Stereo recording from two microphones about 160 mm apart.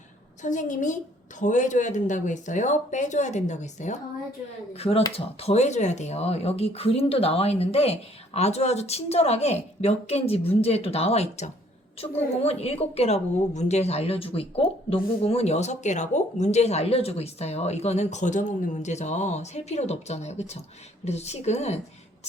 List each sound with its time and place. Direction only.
0.4 s a woman's voice: 50° left (ahead or behind)